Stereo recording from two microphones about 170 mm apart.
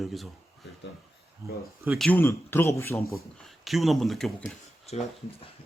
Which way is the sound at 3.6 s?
Centre (ahead or behind).